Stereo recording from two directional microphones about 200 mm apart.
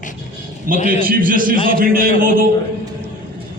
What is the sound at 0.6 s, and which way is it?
A man's voice, 45° right (ahead or behind).